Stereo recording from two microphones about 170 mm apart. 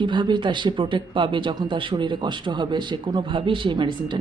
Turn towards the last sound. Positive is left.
turn(degrees=-25)  # may be behind; listen again after turning